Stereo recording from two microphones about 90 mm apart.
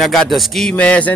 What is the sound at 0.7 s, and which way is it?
Speech, 15° left (ahead or behind).